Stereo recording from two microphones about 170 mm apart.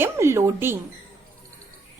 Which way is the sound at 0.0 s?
15° right (ahead or behind).